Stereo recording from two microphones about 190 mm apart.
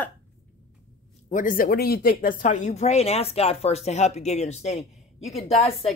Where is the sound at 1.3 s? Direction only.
45° left (ahead or behind).